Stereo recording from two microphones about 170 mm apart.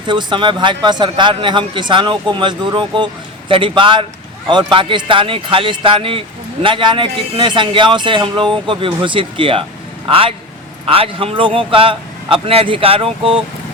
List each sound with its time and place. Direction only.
0.1 s a man's voice: 25° right (ahead or behind)